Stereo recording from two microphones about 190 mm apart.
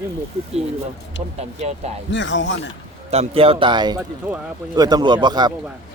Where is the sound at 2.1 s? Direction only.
75° left (ahead or behind).